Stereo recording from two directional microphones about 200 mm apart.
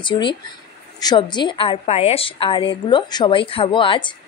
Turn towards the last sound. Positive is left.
turn(degrees=25)  # may be behind; listen again after turning